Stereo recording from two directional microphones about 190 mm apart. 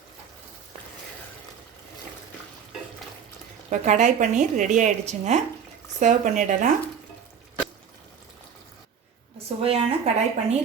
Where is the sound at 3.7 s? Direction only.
40° right (ahead or behind).